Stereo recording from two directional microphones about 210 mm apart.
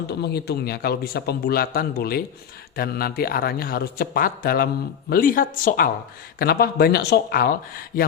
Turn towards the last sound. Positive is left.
turn(degrees=45)  # may be behind; listen again after turning